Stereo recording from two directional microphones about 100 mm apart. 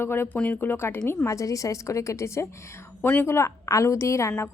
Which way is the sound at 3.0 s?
15° left (ahead or behind).